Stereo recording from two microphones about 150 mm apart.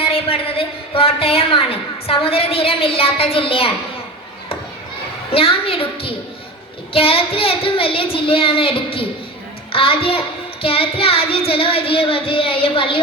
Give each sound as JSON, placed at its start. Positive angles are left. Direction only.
{"t": 0.0, "sound": "a woman's voice", "side_deg": 40}
{"t": 5.3, "sound": "a woman's voice", "side_deg": 40}